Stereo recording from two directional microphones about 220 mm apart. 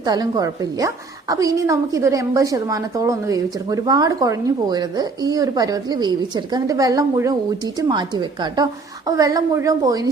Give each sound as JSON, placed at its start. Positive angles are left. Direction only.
{"t": 0.0, "sound": "a woman's voice", "side_deg": -20}